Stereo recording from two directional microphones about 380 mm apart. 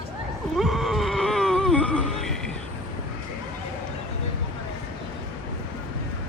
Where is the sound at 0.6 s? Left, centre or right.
Centre.